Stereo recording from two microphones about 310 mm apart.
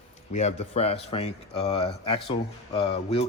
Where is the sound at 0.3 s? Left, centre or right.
Left.